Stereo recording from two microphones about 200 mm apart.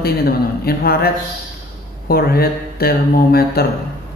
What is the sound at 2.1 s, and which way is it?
Speech, 50° left (ahead or behind).